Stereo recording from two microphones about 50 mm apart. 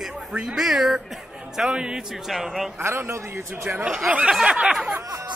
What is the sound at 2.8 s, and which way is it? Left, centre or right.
Speech, right.